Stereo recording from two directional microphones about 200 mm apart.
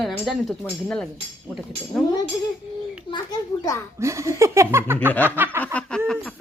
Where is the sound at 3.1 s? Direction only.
20° left (ahead or behind).